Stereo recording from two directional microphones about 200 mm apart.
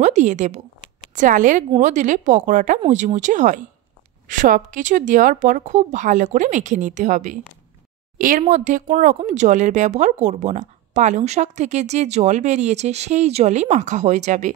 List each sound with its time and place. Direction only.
0.0 s speech: 35° right (ahead or behind)